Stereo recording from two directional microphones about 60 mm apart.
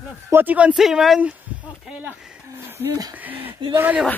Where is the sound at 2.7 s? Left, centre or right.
Right.